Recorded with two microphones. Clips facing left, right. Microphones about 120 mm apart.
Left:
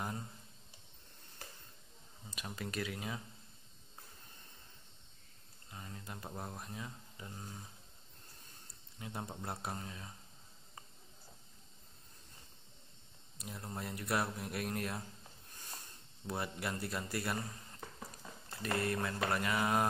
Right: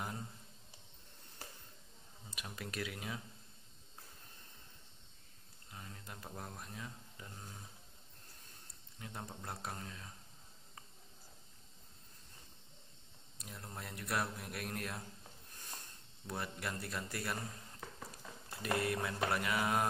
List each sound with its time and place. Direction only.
2.4 s speech: centre (ahead or behind)
5.7 s a sound: 5° left (ahead or behind)
6.3 s speech: 15° left (ahead or behind)
6.6 s speech: 5° left (ahead or behind)
9.0 s speech: 10° left (ahead or behind)
13.4 s speech: 5° left (ahead or behind)
16.3 s speech: 5° left (ahead or behind)
18.5 s speech: 10° right (ahead or behind)